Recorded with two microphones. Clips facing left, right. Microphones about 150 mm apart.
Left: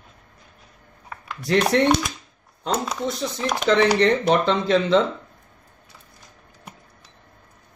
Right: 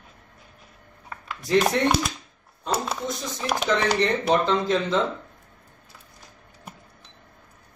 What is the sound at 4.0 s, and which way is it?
A man's voice, 75° left (ahead or behind).